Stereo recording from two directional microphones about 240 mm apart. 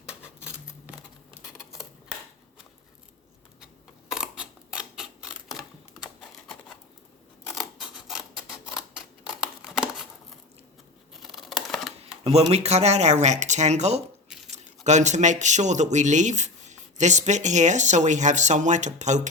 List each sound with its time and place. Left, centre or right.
0.0 s scissors: centre
4.1 s camera: centre
7.5 s scissors: centre
11.1 s a sound: centre
12.2 s speech: right